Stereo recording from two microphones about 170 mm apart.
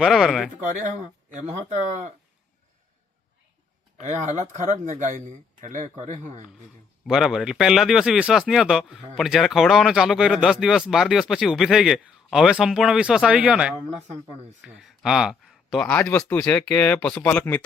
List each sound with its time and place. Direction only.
0.0 s speech: centre (ahead or behind)
0.6 s speech: 50° right (ahead or behind)
4.0 s speech: 45° right (ahead or behind)
7.0 s speech: centre (ahead or behind)
16.0 s speech: 10° left (ahead or behind)